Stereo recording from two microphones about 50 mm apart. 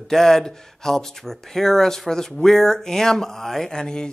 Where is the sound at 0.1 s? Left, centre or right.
Centre.